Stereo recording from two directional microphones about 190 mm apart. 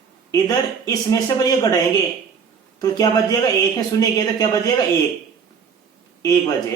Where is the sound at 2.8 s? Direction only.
20° left (ahead or behind).